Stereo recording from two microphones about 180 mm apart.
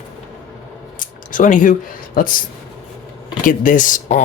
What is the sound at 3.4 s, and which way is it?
Speech, 45° left (ahead or behind).